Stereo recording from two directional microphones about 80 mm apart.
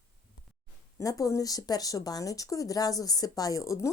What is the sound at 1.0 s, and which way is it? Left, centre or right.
Speech, left.